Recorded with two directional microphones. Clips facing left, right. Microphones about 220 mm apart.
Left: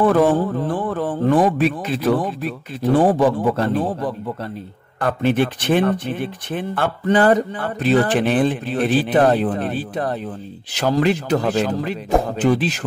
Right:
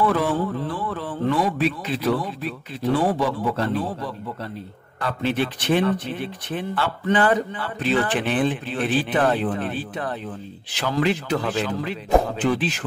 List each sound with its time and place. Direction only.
0.0 s speech: 50° left (ahead or behind)